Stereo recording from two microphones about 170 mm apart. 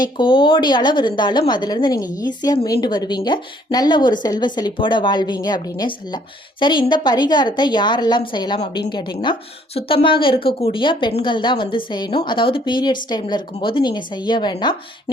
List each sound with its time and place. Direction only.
0.0 s a woman's voice: 30° left (ahead or behind)